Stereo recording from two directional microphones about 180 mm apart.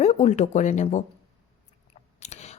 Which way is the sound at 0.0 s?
40° left (ahead or behind).